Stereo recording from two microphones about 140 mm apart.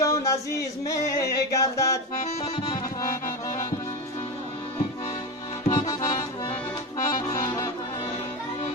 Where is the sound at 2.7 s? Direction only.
25° left (ahead or behind).